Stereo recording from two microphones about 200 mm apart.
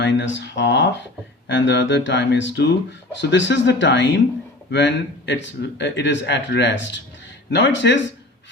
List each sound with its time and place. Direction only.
0.0 s speech: 65° left (ahead or behind)